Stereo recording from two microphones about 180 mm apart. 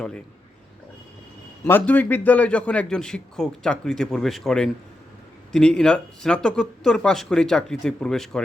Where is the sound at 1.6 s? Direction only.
10° left (ahead or behind).